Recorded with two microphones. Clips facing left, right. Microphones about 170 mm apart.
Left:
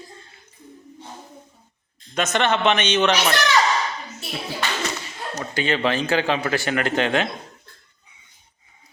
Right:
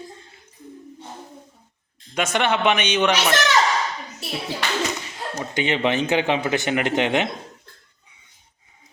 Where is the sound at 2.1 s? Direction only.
10° right (ahead or behind).